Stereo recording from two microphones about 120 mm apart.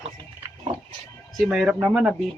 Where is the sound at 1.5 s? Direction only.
10° right (ahead or behind).